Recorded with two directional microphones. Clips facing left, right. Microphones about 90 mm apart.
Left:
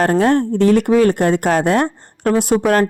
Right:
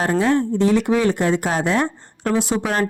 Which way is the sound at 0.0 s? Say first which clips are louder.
Left 4 dB; 55° left (ahead or behind).